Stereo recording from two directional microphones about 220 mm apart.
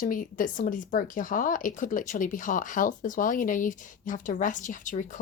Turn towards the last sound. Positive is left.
turn(degrees=35)  # may be behind; listen again after turning